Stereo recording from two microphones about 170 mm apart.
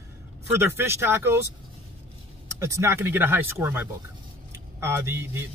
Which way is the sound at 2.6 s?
15° right (ahead or behind).